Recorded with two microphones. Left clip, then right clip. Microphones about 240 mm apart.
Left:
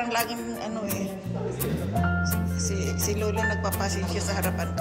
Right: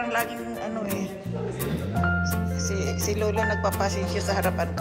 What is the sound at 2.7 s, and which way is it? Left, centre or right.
Music, centre.